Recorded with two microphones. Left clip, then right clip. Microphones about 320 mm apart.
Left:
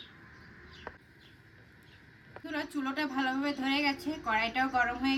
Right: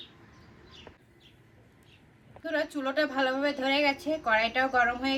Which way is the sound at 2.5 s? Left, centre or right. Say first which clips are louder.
Right 6 dB; centre.